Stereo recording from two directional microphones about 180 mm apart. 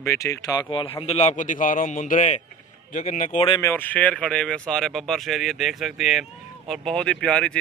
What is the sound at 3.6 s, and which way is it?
Speech, 10° left (ahead or behind).